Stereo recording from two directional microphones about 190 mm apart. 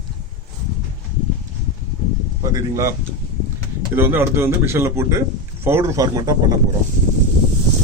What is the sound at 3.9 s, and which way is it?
A man's voice, 10° right (ahead or behind).